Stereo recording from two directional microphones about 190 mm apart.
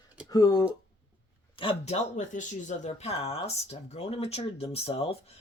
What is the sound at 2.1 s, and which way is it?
Speech, 40° left (ahead or behind).